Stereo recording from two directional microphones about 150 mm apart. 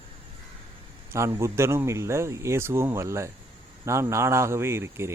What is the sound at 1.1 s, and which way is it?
Speech, 20° right (ahead or behind).